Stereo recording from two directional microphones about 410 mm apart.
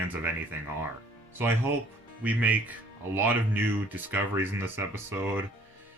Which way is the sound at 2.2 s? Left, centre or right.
Centre.